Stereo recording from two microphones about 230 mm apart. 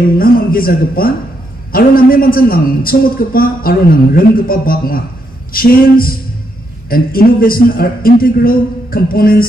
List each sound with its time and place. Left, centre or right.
0.2 s a man's voice: left